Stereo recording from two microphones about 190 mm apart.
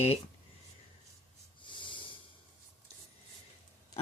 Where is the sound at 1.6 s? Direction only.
25° left (ahead or behind).